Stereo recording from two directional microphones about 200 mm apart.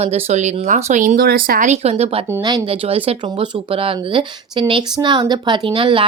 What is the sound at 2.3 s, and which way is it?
Speech, 15° right (ahead or behind).